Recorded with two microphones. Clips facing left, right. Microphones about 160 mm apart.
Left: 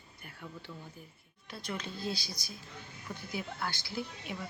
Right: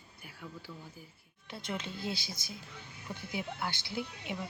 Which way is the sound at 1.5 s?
20° right (ahead or behind).